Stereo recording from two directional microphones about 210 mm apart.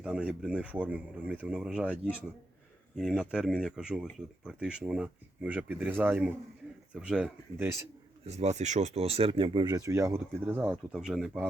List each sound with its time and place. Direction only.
0.0 s speech: 5° right (ahead or behind)
8.3 s speech: 30° right (ahead or behind); by 11.4 s centre (ahead or behind)